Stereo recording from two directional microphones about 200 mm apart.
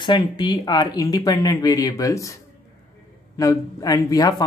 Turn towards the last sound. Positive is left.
turn(degrees=20)  # may be behind; listen again after turning